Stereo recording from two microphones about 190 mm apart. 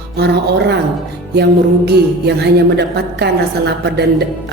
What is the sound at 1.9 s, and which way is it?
A woman's voice, 60° right (ahead or behind).